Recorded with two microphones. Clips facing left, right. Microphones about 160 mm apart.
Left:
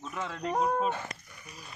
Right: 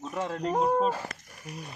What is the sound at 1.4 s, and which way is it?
Speech, 60° right (ahead or behind).